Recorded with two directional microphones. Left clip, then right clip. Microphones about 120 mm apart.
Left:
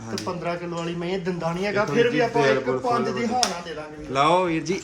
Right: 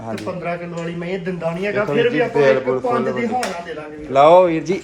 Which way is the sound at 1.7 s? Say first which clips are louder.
Right 3 dB; 20° left (ahead or behind).